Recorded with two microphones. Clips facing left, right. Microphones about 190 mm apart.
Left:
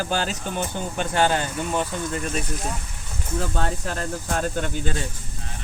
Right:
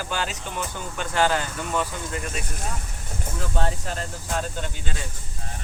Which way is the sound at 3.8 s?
50° left (ahead or behind).